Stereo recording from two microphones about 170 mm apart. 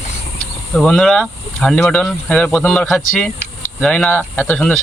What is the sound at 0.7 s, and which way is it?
Speech, 5° left (ahead or behind).